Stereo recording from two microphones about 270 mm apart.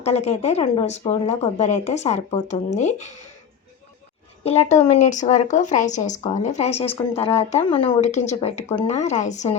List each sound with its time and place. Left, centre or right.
0.0 s a woman's voice: left
4.4 s a woman's voice: left